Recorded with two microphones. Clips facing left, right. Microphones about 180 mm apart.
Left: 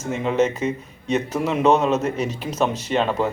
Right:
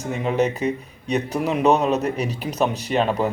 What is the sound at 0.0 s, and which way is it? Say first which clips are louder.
Speech: left 1 dB; 15° right (ahead or behind).